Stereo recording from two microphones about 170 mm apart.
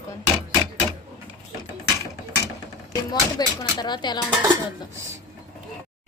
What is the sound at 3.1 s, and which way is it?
Speech, 25° left (ahead or behind).